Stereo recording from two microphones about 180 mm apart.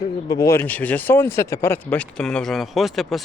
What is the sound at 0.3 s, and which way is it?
Speech, 20° left (ahead or behind).